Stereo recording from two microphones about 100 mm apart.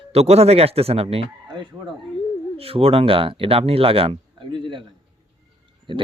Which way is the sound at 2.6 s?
70° right (ahead or behind).